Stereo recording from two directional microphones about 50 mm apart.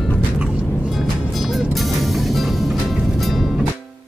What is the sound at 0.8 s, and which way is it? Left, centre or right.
Music, centre.